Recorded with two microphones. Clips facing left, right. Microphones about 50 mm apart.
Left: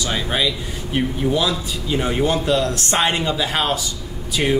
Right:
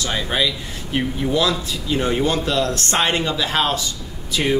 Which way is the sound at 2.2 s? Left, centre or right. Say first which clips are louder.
Left 1 dB; centre.